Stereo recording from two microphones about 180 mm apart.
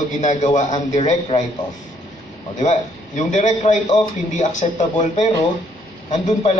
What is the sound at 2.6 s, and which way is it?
A man's voice, 40° left (ahead or behind).